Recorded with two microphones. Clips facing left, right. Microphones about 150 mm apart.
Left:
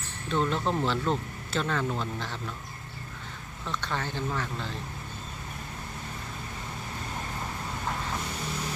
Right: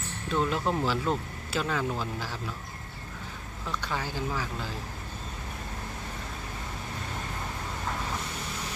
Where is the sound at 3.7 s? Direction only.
10° right (ahead or behind).